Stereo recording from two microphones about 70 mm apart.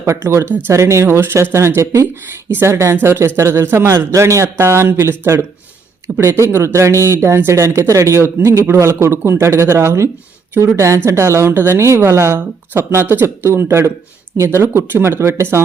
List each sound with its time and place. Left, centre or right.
0.0 s a woman's voice: right
2.5 s a woman's voice: right